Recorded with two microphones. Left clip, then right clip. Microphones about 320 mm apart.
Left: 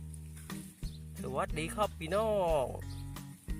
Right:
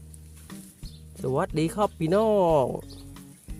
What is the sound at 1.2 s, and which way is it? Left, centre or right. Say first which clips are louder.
Speech: right 10 dB; left.